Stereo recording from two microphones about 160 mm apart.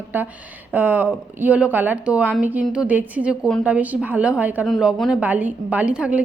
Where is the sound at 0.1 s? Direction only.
10° right (ahead or behind).